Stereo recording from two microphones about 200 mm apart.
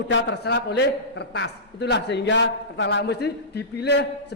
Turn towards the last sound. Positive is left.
turn(degrees=55)  # may be behind; listen again after turning